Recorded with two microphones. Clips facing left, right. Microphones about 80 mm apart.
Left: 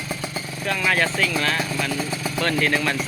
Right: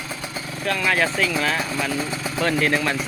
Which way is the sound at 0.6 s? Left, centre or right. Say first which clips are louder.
Right 1 dB; centre.